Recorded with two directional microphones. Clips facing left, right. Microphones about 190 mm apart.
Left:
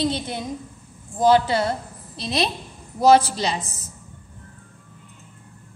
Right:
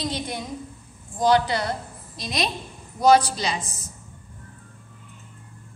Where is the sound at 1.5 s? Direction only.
25° left (ahead or behind).